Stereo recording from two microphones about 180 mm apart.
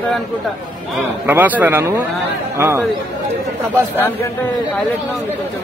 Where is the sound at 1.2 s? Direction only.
10° right (ahead or behind).